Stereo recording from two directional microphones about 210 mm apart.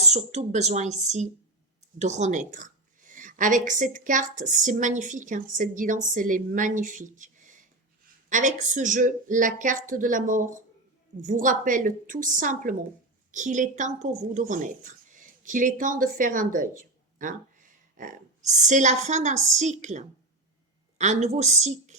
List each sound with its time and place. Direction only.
0.1 s a woman's voice: 30° right (ahead or behind)